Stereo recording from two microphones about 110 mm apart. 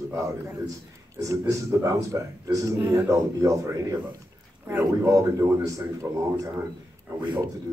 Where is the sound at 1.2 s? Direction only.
30° right (ahead or behind).